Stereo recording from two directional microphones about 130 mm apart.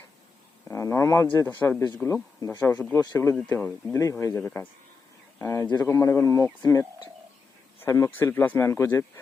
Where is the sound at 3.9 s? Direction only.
20° left (ahead or behind).